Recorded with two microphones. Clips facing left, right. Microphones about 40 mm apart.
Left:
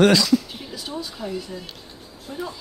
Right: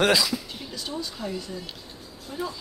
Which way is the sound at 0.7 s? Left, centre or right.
Centre.